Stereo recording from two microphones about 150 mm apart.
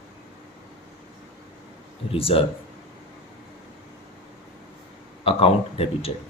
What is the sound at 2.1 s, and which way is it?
Speech, 40° left (ahead or behind).